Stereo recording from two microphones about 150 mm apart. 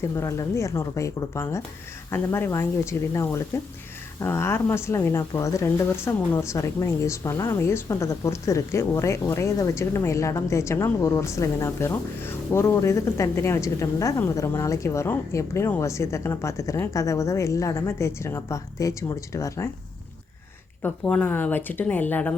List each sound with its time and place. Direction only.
0.2 s a woman's voice: 20° left (ahead or behind)
20.8 s speech: 10° left (ahead or behind)